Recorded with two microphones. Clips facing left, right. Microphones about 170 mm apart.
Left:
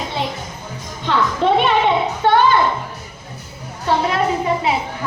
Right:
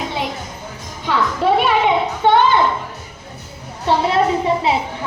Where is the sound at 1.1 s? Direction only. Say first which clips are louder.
Left 1 dB; 5° right (ahead or behind).